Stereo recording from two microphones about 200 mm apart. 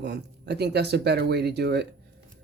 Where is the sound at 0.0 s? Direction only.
55° right (ahead or behind).